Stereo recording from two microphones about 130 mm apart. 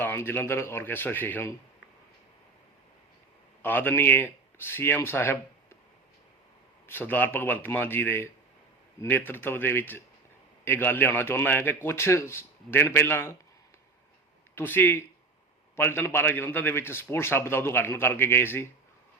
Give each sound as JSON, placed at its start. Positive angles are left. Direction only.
{"t": 0.0, "sound": "a man's voice", "side_deg": 15}
{"t": 3.6, "sound": "a man's voice", "side_deg": 15}
{"t": 6.8, "sound": "a man's voice", "side_deg": 15}
{"t": 14.5, "sound": "a man's voice", "side_deg": 15}